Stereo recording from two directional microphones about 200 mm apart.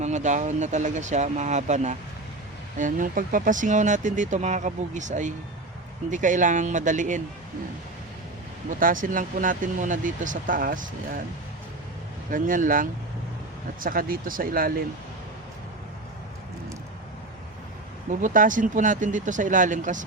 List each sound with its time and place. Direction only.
0.0 s speech: 35° right (ahead or behind)
8.8 s speech: 40° right (ahead or behind)
12.3 s speech: 40° right (ahead or behind)
18.2 s speech: 40° right (ahead or behind)